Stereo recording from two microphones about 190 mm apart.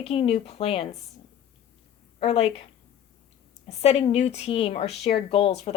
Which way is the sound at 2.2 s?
30° left (ahead or behind).